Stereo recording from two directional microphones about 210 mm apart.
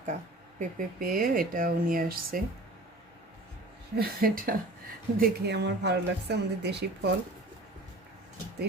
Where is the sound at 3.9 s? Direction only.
45° right (ahead or behind).